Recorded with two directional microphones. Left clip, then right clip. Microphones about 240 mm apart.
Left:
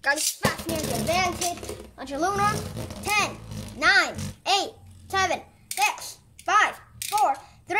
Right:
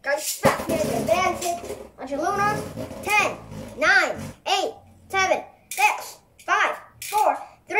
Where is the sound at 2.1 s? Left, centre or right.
Left.